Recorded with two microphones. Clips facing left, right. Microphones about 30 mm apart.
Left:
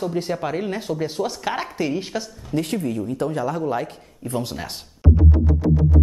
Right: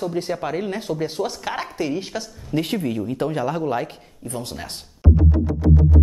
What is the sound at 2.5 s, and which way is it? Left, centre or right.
Speech, right.